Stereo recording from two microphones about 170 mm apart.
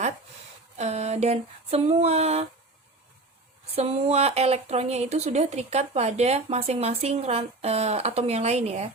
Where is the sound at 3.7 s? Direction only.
35° right (ahead or behind).